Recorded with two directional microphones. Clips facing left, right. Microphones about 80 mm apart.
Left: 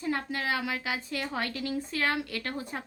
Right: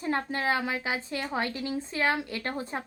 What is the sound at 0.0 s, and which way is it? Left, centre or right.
A woman's voice, right.